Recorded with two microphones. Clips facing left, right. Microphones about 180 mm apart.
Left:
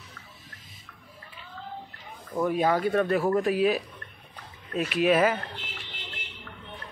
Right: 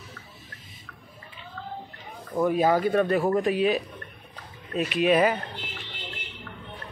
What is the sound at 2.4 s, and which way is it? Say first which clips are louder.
Speech: right 2 dB; centre (ahead or behind).